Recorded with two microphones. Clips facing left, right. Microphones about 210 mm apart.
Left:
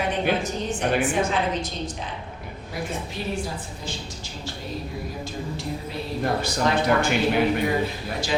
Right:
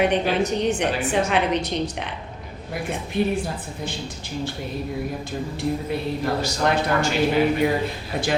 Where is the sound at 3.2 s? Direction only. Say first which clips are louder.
Right 11 dB; 55° right (ahead or behind).